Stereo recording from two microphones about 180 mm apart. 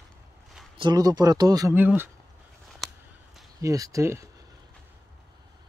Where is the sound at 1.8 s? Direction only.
10° right (ahead or behind).